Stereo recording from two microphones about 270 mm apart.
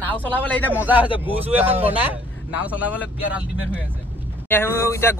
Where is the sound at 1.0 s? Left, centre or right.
Centre.